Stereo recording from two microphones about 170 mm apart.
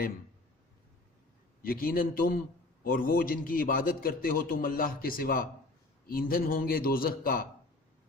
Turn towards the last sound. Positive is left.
turn(degrees=60)  # may be behind; listen again after turning